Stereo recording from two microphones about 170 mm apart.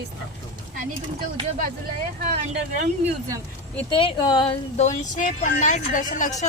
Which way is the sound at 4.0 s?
30° left (ahead or behind).